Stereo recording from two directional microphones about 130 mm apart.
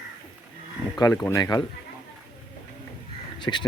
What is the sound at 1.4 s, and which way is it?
Speech, 30° left (ahead or behind).